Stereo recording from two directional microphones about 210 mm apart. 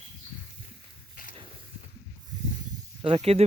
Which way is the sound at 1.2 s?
40° left (ahead or behind).